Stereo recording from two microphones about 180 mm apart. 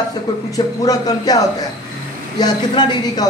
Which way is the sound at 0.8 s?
20° left (ahead or behind).